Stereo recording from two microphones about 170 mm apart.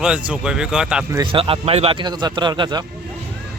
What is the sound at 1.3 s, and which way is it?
A man's voice, 30° right (ahead or behind).